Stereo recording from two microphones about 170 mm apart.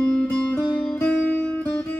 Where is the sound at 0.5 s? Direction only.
10° left (ahead or behind).